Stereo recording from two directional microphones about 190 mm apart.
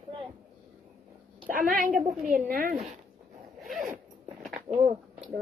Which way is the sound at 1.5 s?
45° right (ahead or behind).